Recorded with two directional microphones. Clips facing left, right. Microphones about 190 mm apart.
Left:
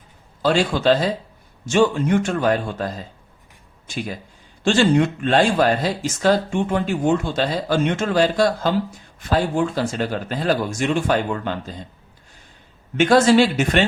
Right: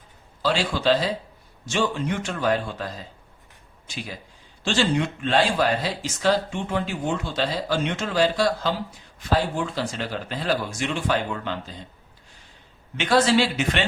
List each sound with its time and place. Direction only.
0.4 s speech: 50° left (ahead or behind)
4.6 s speech: 50° left (ahead or behind)
13.0 s speech: 45° left (ahead or behind)